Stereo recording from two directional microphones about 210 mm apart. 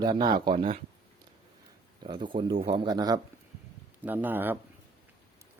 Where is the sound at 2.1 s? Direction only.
20° right (ahead or behind).